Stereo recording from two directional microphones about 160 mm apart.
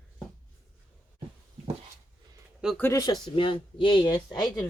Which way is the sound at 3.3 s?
30° left (ahead or behind).